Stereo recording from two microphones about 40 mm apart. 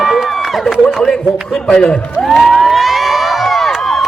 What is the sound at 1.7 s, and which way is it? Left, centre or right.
Speech, left.